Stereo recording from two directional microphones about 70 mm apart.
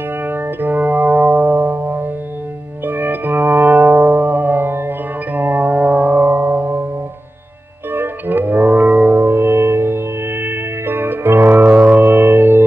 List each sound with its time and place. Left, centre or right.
0.3 s music: right
7.9 s music: right